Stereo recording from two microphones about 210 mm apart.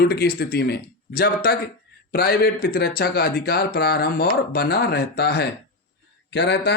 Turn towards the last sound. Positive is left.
turn(degrees=55)  # may be behind; listen again after turning